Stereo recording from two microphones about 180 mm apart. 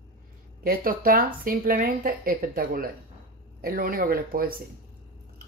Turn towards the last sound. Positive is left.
turn(degrees=-55)  # may be behind; listen again after turning